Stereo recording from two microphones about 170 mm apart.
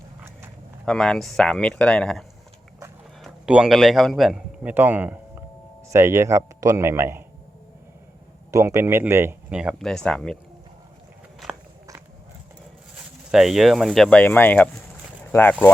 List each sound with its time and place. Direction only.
0.9 s a man's voice: 5° left (ahead or behind); by 7.2 s 15° right (ahead or behind)
8.4 s speech: 20° right (ahead or behind); by 10.3 s 5° left (ahead or behind)
13.3 s speech: centre (ahead or behind)